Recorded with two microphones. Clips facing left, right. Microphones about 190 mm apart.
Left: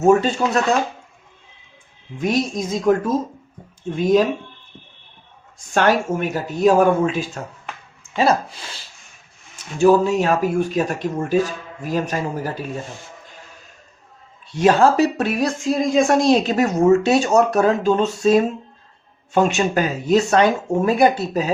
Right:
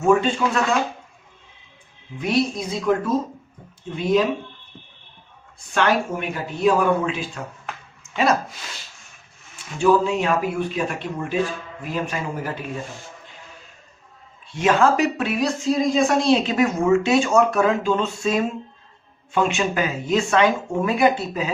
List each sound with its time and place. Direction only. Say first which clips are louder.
0.0 s speech: left 3 dB; 40° left (ahead or behind)
2.1 s speech: left 1 dB; 45° left (ahead or behind)
5.7 s speech: left 3 dB; 45° left (ahead or behind)
8.1 s speech: left 2 dB; 30° left (ahead or behind)
9.6 s speech: left 4 dB; 45° left (ahead or behind)
14.4 s speech: left 3 dB; 35° left (ahead or behind)